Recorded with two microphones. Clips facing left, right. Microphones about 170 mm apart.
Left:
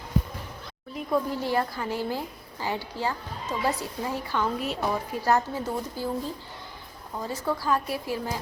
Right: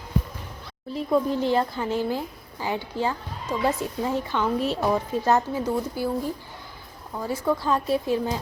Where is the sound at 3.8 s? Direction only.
20° right (ahead or behind).